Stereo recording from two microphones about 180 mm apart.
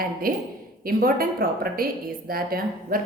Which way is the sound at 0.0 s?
55° right (ahead or behind).